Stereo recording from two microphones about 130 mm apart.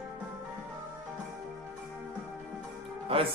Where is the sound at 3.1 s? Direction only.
45° right (ahead or behind).